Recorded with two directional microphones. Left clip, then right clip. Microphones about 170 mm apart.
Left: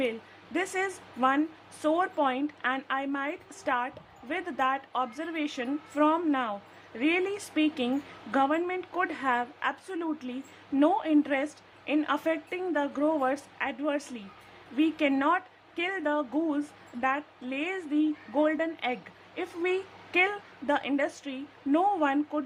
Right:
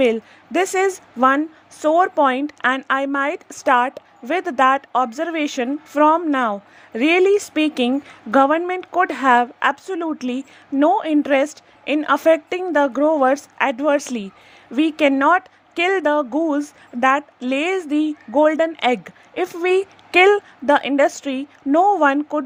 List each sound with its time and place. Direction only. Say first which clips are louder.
0.0 s speech: right 14 dB; 50° right (ahead or behind)